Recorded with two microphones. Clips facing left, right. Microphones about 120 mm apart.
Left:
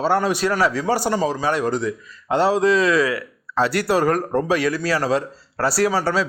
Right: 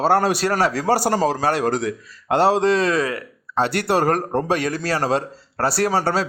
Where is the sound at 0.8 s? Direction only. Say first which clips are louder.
Right 2 dB; 75° right (ahead or behind).